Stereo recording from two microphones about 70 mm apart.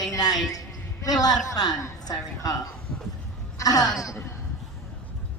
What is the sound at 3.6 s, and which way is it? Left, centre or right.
Speech, left.